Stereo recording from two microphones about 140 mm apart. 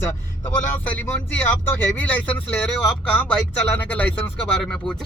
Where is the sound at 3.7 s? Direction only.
10° left (ahead or behind).